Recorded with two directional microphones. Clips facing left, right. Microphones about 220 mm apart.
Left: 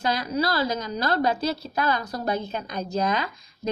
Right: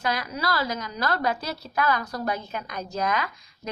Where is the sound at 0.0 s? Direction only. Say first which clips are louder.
Left 4 dB; 25° left (ahead or behind).